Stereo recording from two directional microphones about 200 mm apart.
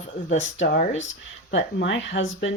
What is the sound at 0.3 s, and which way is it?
Speech, 65° left (ahead or behind).